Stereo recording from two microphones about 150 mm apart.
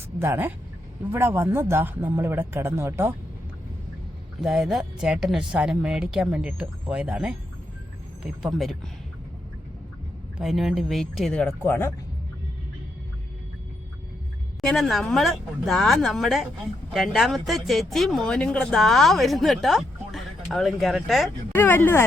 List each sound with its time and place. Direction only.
0.2 s speech: 15° right (ahead or behind)
4.4 s speech: 5° right (ahead or behind)
10.3 s speech: centre (ahead or behind); by 11.9 s 15° left (ahead or behind)
14.6 s speech: centre (ahead or behind)
21.5 s speech: 15° left (ahead or behind)